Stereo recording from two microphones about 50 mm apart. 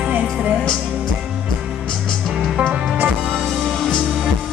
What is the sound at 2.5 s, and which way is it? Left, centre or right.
Music, right.